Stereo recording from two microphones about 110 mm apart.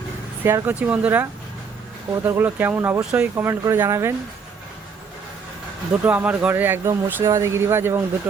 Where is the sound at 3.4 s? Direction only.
25° right (ahead or behind).